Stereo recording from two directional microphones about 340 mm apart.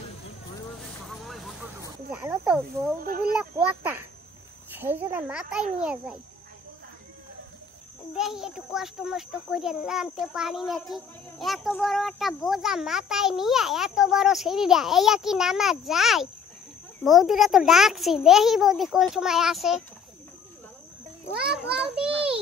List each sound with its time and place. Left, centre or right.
0.7 s snake: centre
3.0 s speech: right
3.3 s a child's voice: centre
8.2 s a child's voice: centre